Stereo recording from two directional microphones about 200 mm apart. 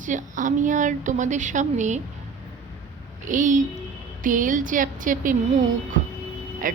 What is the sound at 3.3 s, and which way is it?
A woman's voice, 40° right (ahead or behind).